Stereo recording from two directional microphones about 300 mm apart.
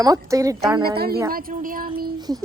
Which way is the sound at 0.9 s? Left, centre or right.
Right.